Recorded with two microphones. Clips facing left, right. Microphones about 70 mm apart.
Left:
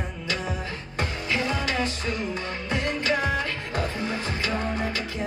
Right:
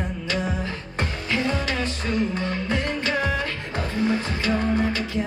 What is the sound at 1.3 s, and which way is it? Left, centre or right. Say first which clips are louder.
Music: right 2 dB; left.